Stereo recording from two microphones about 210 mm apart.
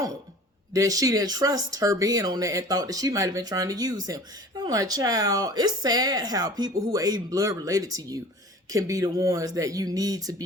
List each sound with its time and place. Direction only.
0.7 s speech: 15° right (ahead or behind)